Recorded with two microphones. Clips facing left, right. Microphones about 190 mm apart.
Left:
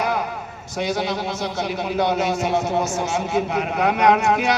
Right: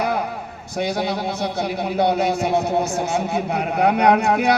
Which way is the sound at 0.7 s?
60° right (ahead or behind).